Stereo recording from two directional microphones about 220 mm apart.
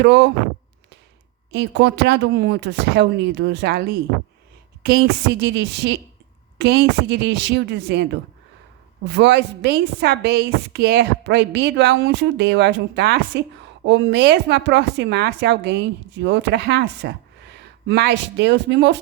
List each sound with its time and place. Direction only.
0.0 s a woman's voice: 50° right (ahead or behind)
1.5 s a woman's voice: 50° right (ahead or behind)
5.4 s a woman's voice: 50° right (ahead or behind)